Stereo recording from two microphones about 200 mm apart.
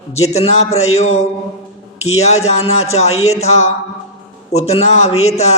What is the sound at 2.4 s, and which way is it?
A man's voice, 35° left (ahead or behind).